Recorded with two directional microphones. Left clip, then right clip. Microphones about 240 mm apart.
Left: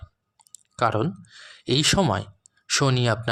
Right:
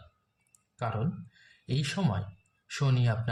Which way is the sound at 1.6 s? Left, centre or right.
Left.